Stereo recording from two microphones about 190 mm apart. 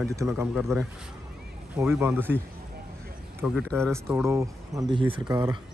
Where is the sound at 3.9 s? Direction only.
15° right (ahead or behind).